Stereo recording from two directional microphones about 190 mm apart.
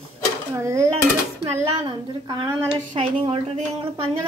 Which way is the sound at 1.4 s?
25° right (ahead or behind).